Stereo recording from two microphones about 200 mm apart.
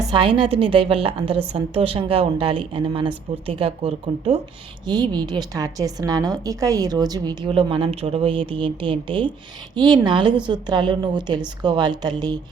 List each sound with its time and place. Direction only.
0.1 s a woman's voice: 25° right (ahead or behind)